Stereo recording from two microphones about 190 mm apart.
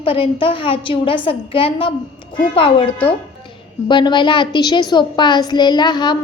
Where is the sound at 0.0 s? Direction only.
30° left (ahead or behind).